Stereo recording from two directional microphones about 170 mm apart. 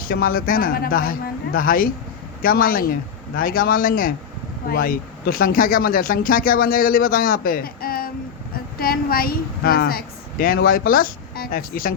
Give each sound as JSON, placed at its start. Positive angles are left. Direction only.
{"t": 0.0, "sound": "speech", "side_deg": 60}